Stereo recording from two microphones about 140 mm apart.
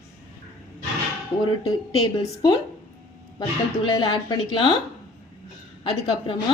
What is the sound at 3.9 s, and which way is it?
Speech, 35° left (ahead or behind).